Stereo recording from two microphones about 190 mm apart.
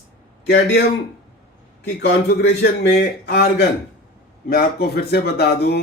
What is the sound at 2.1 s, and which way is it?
A man's voice, 60° left (ahead or behind).